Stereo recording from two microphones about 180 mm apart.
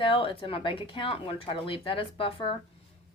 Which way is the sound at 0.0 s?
30° left (ahead or behind).